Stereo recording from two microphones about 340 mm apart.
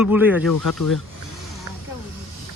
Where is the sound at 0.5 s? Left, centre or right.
Left.